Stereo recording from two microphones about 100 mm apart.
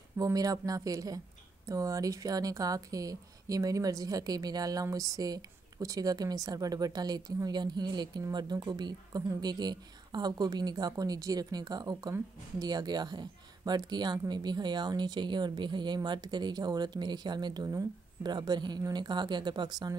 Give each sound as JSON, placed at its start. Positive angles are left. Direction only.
{"t": 0.2, "sound": "speech", "side_deg": -35}